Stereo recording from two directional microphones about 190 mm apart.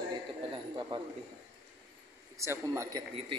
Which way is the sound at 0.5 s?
25° right (ahead or behind).